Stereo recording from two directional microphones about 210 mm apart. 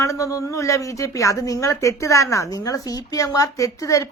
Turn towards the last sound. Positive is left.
turn(degrees=15)  # may be behind; listen again after turning